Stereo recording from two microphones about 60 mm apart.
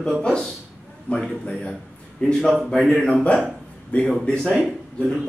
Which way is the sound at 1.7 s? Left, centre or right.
Centre.